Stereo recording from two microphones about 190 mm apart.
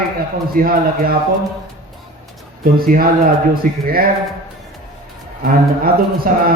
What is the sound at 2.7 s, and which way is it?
A man's voice, 50° right (ahead or behind).